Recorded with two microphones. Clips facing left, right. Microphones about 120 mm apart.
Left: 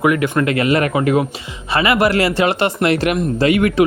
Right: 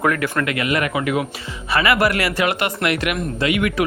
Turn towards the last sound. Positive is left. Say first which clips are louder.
# left 5 dB
turn(degrees=35)  # may be behind; listen again after turning